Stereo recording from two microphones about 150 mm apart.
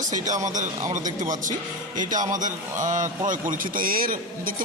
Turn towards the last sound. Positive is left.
turn(degrees=-70)  # may be behind; listen again after turning